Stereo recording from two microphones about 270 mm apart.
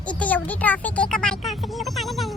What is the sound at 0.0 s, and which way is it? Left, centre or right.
Speech, centre.